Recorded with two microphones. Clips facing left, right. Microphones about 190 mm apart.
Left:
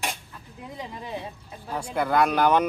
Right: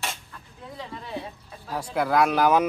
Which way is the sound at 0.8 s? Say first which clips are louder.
Even; 15° left (ahead or behind).